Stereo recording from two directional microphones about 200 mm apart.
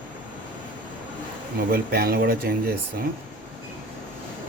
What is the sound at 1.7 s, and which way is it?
Speech, 50° right (ahead or behind).